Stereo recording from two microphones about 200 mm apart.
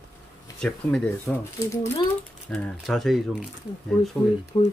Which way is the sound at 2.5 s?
Centre (ahead or behind).